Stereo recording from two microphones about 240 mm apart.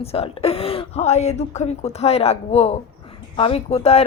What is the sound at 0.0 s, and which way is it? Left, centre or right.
A woman's voice, left.